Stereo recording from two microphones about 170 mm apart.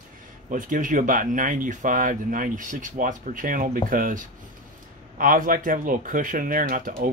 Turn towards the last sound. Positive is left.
turn(degrees=-55)  # may be behind; listen again after turning